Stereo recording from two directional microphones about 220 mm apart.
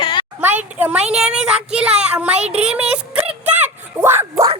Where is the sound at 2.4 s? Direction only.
30° right (ahead or behind).